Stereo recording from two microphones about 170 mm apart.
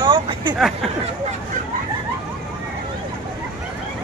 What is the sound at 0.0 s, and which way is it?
Hubbub, 30° right (ahead or behind).